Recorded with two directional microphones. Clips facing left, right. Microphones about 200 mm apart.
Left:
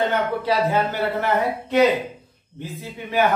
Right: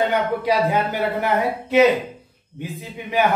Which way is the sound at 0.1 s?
15° right (ahead or behind).